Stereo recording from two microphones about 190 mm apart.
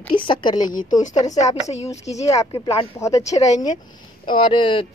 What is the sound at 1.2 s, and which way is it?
Speech, 20° left (ahead or behind).